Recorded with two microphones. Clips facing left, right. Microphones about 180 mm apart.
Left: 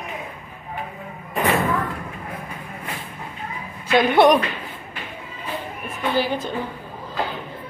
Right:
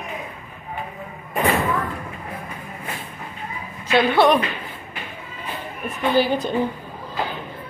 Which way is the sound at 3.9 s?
15° left (ahead or behind).